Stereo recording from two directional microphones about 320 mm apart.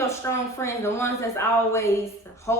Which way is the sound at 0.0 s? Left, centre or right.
Centre.